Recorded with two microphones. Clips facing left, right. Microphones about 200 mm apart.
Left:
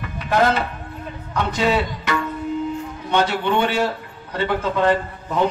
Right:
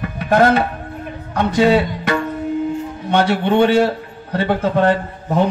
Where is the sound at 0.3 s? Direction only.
55° right (ahead or behind).